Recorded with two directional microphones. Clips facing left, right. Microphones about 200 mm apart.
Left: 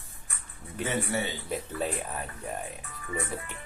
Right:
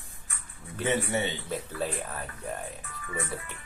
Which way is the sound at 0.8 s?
20° right (ahead or behind).